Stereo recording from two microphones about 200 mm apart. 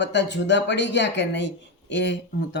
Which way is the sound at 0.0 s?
60° left (ahead or behind).